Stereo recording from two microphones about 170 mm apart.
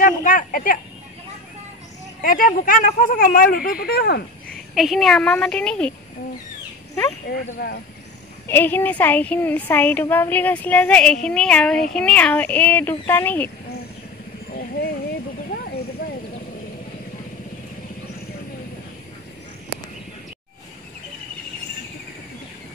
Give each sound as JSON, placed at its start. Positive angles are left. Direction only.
{"t": 0.0, "sound": "speech", "side_deg": 50}
{"t": 2.2, "sound": "speech", "side_deg": 55}
{"t": 4.7, "sound": "a woman's voice", "side_deg": 0}
{"t": 7.3, "sound": "speech", "side_deg": 75}
{"t": 8.5, "sound": "a woman's voice", "side_deg": 10}
{"t": 15.5, "sound": "vehicle", "side_deg": 65}
{"t": 16.0, "sound": "a sound", "side_deg": 60}